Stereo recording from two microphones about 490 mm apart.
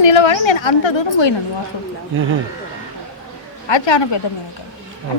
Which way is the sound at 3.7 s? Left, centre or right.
Left.